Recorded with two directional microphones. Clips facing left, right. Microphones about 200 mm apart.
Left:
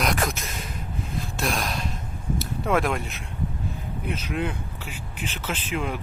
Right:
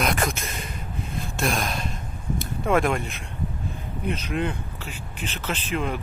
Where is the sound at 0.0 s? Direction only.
Centre (ahead or behind).